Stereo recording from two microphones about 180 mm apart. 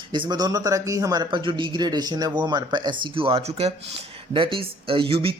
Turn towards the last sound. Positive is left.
turn(degrees=-30)  # may be behind; listen again after turning